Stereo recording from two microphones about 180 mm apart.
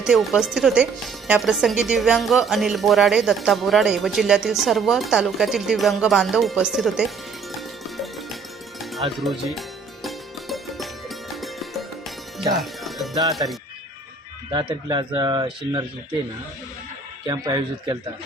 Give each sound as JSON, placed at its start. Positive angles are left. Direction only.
{"t": 0.0, "sound": "speech", "side_deg": 0}
{"t": 7.9, "sound": "music", "side_deg": 0}
{"t": 13.3, "sound": "speech", "side_deg": 0}
{"t": 14.5, "sound": "speech", "side_deg": -25}
{"t": 17.2, "sound": "speech", "side_deg": -20}